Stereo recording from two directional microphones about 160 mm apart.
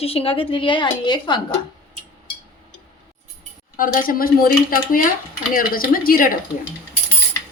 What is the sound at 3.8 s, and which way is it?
A woman's voice, 65° left (ahead or behind).